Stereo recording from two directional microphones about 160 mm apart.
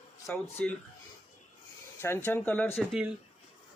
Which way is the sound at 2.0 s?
15° left (ahead or behind).